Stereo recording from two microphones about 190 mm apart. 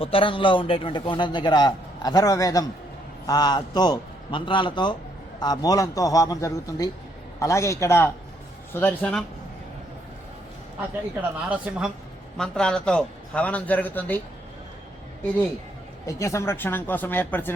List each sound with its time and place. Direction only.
0.0 s a man's voice: 30° left (ahead or behind); by 9.2 s 10° left (ahead or behind)
11.4 s a woman's voice: 5° right (ahead or behind); by 14.2 s 10° left (ahead or behind)
16.0 s a man's voice: 15° left (ahead or behind)